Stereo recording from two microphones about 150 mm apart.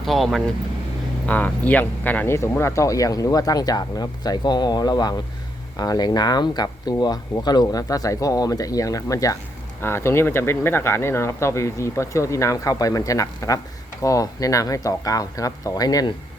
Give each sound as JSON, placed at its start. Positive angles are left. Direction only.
{"t": 0.0, "sound": "speech", "side_deg": 0}